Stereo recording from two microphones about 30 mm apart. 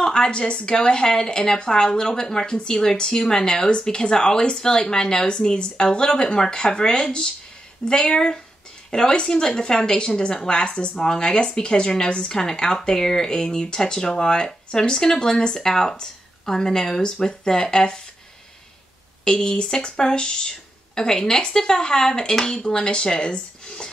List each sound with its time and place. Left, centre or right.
0.0 s speech: left
10.6 s speech: left
11.1 s speech: left
19.2 s speech: left